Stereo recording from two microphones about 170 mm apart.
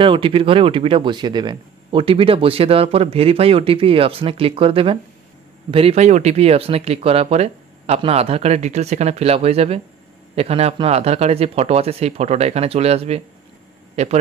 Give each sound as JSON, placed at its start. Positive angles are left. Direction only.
{"t": 0.0, "sound": "speech", "side_deg": -30}